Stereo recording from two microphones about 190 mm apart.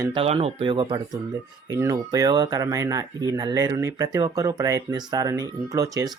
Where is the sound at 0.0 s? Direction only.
30° right (ahead or behind).